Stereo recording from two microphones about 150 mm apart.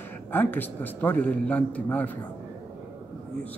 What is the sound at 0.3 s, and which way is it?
Speech, 10° left (ahead or behind).